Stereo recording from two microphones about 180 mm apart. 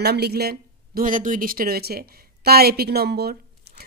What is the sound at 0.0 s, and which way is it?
Speech, 65° right (ahead or behind).